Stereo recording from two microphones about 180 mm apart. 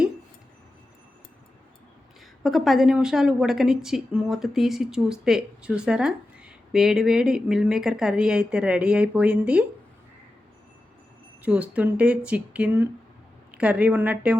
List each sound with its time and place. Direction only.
2.4 s a woman's voice: centre (ahead or behind)
11.4 s speech: 10° right (ahead or behind)